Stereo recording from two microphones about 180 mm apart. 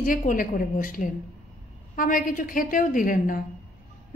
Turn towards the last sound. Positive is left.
turn(degrees=50)  # may be behind; listen again after turning